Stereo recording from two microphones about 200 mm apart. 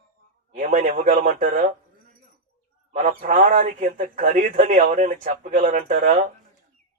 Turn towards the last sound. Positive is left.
turn(degrees=-40)  # may be behind; listen again after turning